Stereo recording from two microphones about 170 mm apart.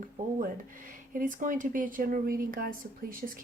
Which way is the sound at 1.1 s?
50° right (ahead or behind).